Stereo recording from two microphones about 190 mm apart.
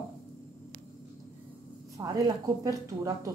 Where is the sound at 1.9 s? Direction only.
20° right (ahead or behind).